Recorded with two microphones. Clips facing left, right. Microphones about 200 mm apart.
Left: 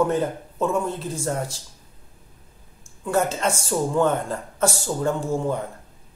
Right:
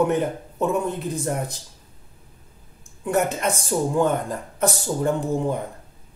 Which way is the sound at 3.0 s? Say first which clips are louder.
Even; 20° right (ahead or behind).